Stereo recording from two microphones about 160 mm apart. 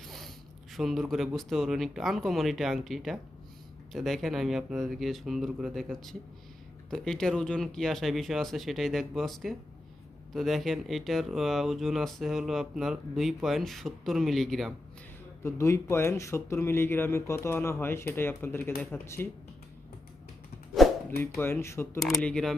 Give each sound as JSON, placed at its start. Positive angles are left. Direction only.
{"t": 0.0, "sound": "speech", "side_deg": 0}
{"t": 15.4, "sound": "speech", "side_deg": 15}
{"t": 20.8, "sound": "dog", "side_deg": 0}
{"t": 21.2, "sound": "speech", "side_deg": 15}
{"t": 21.9, "sound": "speech", "side_deg": 0}